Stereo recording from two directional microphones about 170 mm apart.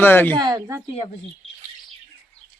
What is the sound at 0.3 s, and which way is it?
Speech, 20° right (ahead or behind).